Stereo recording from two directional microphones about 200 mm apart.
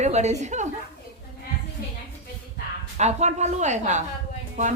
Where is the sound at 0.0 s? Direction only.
35° right (ahead or behind).